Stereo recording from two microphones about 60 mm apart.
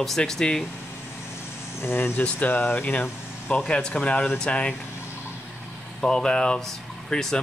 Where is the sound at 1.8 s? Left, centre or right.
Left.